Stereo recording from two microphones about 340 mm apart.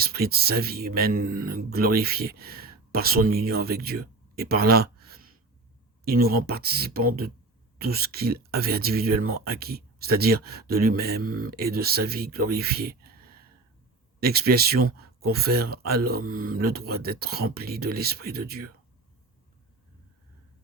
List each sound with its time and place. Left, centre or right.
0.0 s speech: right
14.2 s speech: right